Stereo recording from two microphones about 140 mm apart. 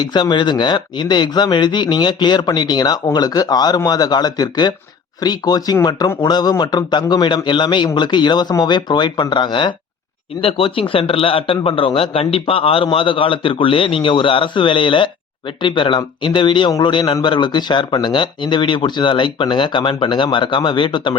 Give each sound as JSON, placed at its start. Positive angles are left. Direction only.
{"t": 0.0, "sound": "a man's voice", "side_deg": 30}